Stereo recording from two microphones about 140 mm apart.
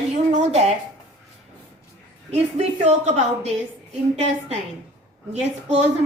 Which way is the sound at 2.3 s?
55° right (ahead or behind).